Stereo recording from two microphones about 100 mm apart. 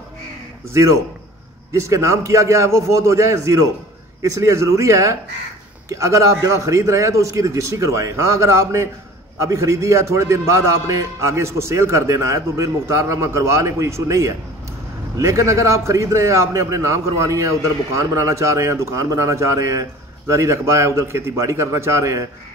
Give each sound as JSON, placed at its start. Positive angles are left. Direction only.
{"t": 0.7, "sound": "a man's voice", "side_deg": -30}